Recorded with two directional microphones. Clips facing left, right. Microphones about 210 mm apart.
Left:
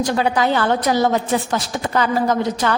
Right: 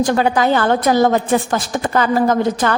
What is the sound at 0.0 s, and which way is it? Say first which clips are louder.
A woman's voice: right 3 dB; 50° right (ahead or behind).